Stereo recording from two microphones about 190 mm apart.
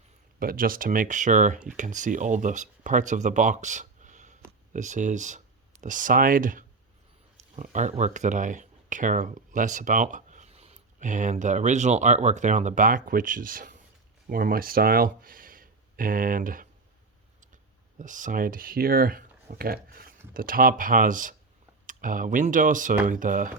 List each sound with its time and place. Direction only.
0.3 s speech: 50° right (ahead or behind)